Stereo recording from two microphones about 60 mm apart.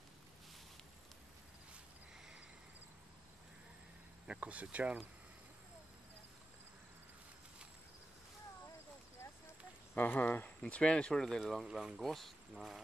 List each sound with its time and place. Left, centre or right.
4.3 s speech: right
9.9 s speech: left
10.6 s speech: centre
11.6 s speech: centre
12.0 s speech: centre